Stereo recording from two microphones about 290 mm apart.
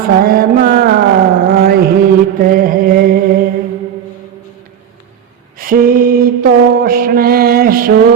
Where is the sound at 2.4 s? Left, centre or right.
Right.